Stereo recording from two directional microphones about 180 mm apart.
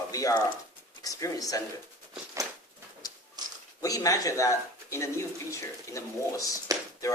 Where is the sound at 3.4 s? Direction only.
20° right (ahead or behind).